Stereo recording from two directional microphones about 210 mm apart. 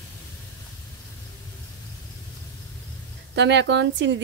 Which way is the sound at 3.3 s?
55° right (ahead or behind).